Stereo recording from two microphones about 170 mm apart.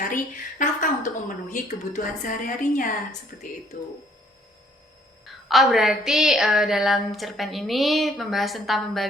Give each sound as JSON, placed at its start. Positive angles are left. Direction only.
{"t": 0.6, "sound": "a woman's voice", "side_deg": 50}
{"t": 5.5, "sound": "a woman's voice", "side_deg": 0}